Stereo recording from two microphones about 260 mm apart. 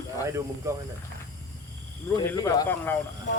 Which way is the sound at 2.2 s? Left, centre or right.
Centre.